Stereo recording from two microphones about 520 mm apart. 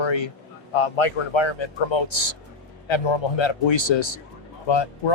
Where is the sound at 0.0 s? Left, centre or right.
Left.